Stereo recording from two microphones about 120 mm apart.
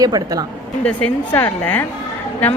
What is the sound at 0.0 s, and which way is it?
Speech, 30° right (ahead or behind).